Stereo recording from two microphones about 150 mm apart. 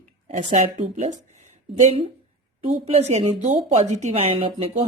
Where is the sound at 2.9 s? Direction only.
45° right (ahead or behind).